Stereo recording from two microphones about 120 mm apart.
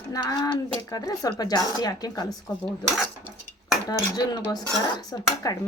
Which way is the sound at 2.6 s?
5° left (ahead or behind).